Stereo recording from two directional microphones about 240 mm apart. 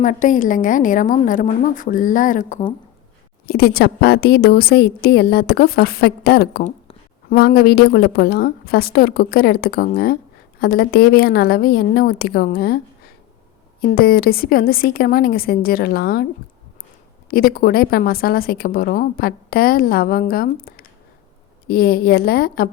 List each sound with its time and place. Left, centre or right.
0.0 s a woman's voice: left
13.9 s a woman's voice: left
17.2 s a woman's voice: left